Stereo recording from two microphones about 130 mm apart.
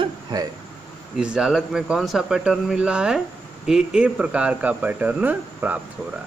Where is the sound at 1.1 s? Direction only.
5° right (ahead or behind).